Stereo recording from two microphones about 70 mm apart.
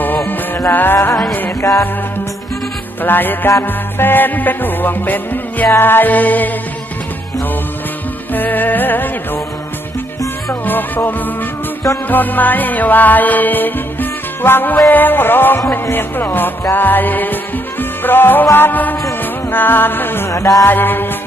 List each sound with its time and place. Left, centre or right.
0.3 s music: left
3.0 s music: left
8.3 s music: left
10.6 s music: left
20.2 s music: left
20.6 s music: left